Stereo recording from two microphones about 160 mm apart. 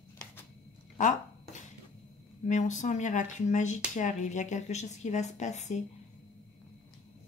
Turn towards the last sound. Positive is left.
turn(degrees=45)  # may be behind; listen again after turning